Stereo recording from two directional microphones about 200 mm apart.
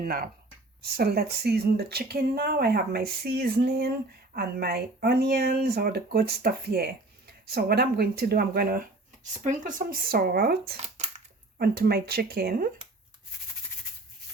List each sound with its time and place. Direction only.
0.0 s speech: 45° right (ahead or behind)
10.8 s crushing: 35° right (ahead or behind)
11.5 s speech: 50° right (ahead or behind)